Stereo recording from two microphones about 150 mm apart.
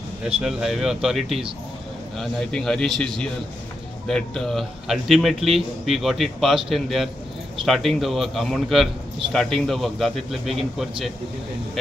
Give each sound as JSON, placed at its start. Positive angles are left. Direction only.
{"t": 0.4, "sound": "a man's voice", "side_deg": 0}